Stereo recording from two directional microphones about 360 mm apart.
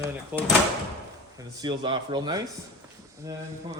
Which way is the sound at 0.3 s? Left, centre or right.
Centre.